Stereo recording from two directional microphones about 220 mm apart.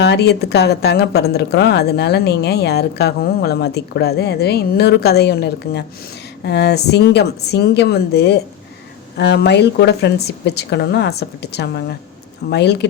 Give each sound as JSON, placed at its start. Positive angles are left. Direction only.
{"t": 0.0, "sound": "a woman's voice", "side_deg": 50}